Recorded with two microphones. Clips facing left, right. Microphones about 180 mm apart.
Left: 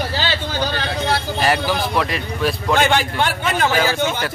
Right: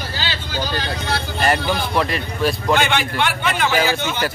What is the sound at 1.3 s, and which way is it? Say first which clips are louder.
A man's voice: right 2 dB; 5° left (ahead or behind).